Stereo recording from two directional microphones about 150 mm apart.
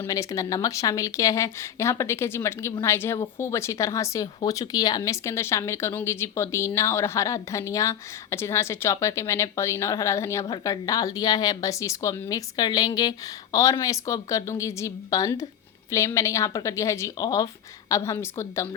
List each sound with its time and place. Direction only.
0.1 s a woman's voice: 20° left (ahead or behind)